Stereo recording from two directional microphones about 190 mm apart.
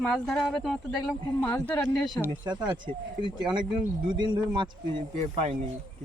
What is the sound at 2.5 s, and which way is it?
Speech, 25° right (ahead or behind).